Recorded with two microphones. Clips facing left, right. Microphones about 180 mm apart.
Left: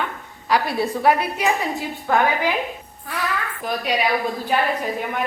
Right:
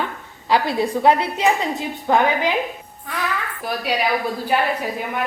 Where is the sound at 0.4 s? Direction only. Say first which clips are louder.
Right 2 dB; 25° right (ahead or behind).